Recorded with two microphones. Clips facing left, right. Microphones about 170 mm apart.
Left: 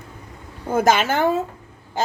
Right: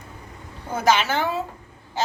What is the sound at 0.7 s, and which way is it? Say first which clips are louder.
Speech: left 3 dB; 50° left (ahead or behind).